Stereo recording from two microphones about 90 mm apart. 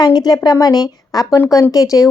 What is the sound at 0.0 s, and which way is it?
A woman's voice, 50° left (ahead or behind).